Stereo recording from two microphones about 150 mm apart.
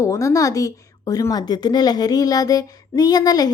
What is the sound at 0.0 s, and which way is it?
A woman's voice, 20° left (ahead or behind).